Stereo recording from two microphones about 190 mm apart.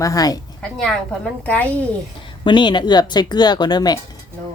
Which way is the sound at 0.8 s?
5° left (ahead or behind).